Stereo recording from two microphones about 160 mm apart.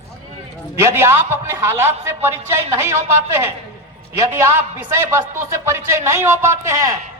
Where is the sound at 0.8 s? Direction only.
15° right (ahead or behind).